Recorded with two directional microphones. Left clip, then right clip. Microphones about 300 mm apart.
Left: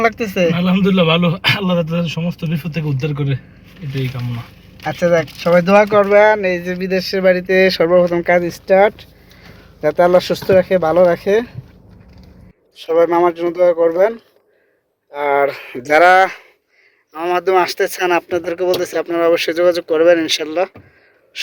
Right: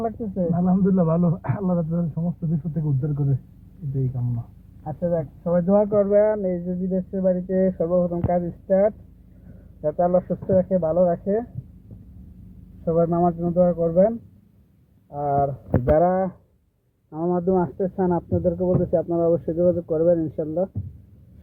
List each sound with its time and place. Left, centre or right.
0.0 s speech: left
4.8 s speech: left
13.0 s speech: left
15.1 s speech: left
16.0 s speech: left